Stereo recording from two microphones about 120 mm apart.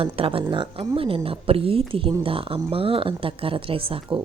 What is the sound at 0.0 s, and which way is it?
Speech, 50° right (ahead or behind).